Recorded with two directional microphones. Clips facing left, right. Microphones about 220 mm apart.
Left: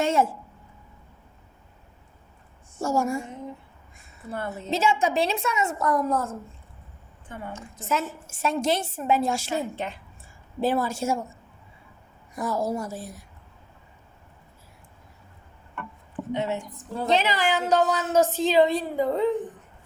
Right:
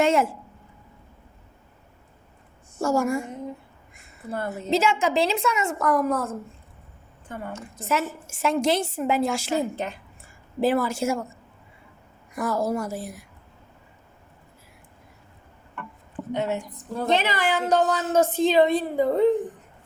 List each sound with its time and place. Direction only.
0.0 s a sound: 90° right
2.8 s a woman's voice: 90° right
4.3 s a woman's voice: 40° right (ahead or behind)
4.7 s a woman's voice: 90° right; by 6.3 s 70° right (ahead or behind)
7.5 s a woman's voice: 65° right (ahead or behind); by 9.5 s 90° right
9.6 s a woman's voice: 40° right (ahead or behind)
10.6 s a woman's voice: 90° right
12.3 s a woman's voice: 80° right
16.3 s a woman's voice: 45° right (ahead or behind)